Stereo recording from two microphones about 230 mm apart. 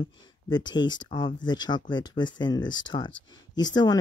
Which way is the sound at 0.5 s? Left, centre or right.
Centre.